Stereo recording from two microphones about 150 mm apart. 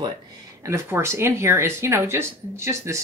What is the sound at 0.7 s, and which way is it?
Speech, 15° right (ahead or behind).